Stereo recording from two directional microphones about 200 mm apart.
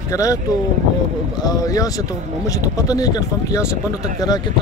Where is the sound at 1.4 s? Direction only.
20° left (ahead or behind).